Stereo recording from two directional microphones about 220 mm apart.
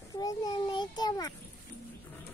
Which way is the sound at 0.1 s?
15° left (ahead or behind).